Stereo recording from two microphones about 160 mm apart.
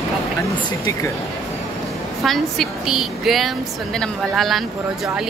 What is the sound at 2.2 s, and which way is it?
Speech, centre (ahead or behind).